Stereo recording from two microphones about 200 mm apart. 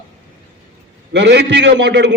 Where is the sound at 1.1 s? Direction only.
60° right (ahead or behind).